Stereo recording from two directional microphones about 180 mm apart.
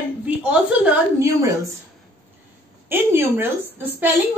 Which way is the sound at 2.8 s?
10° right (ahead or behind).